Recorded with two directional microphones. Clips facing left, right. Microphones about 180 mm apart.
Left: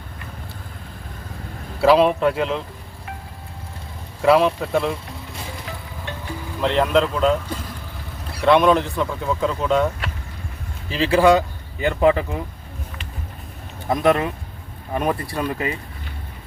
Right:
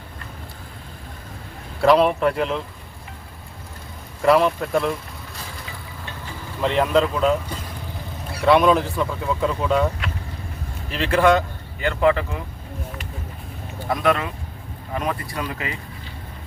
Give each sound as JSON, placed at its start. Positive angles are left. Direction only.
{"t": 1.8, "sound": "speech", "side_deg": 5}
{"t": 4.2, "sound": "speech", "side_deg": 0}
{"t": 6.6, "sound": "speech", "side_deg": -10}
{"t": 8.4, "sound": "speech", "side_deg": 0}
{"t": 13.8, "sound": "speech", "side_deg": 20}